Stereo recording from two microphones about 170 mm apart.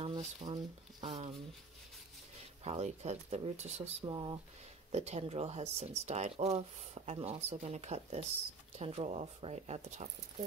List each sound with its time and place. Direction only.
0.0 s speech: 35° right (ahead or behind)
2.6 s speech: 40° right (ahead or behind)
4.1 s speech: 30° right (ahead or behind)
4.9 s speech: 40° right (ahead or behind)